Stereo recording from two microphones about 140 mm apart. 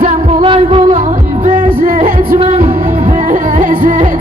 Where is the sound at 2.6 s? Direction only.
75° right (ahead or behind).